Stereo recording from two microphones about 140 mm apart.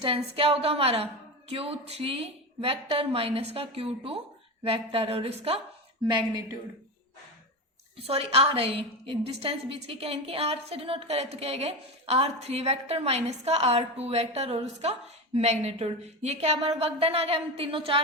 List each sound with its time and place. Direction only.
0.0 s a woman's voice: 40° right (ahead or behind)
7.9 s a woman's voice: 45° right (ahead or behind)